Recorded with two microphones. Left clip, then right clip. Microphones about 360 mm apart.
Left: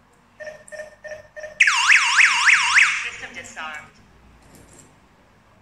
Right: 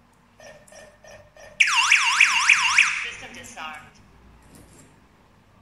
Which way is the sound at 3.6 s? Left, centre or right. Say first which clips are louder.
Left 3 dB; centre.